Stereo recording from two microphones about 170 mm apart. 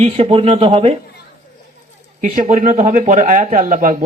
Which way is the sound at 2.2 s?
50° right (ahead or behind).